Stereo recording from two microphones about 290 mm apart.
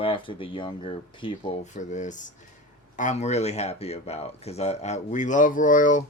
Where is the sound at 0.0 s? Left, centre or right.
Centre.